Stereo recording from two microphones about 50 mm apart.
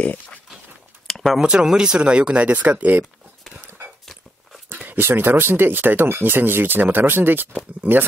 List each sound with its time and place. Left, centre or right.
0.0 s pig: left
1.0 s a sound: centre
1.4 s speech: centre
4.7 s dog: right
5.0 s speech: right